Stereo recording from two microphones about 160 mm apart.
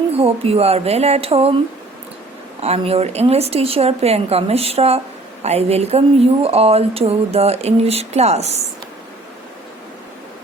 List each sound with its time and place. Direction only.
0.1 s speech: 35° right (ahead or behind)
2.6 s speech: 40° right (ahead or behind)